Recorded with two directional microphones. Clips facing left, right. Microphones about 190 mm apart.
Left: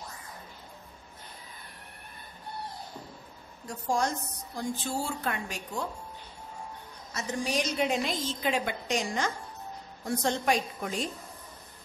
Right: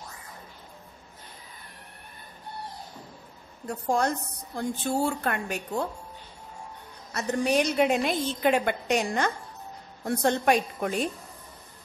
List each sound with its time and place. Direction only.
3.6 s a woman's voice: 60° right (ahead or behind)
7.2 s a woman's voice: 60° right (ahead or behind)